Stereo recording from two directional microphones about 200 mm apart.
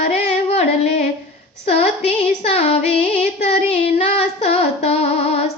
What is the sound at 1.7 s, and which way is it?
Female singing, 30° left (ahead or behind).